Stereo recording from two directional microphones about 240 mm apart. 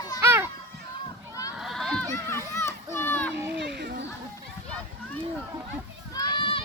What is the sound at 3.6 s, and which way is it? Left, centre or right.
Children playing, right.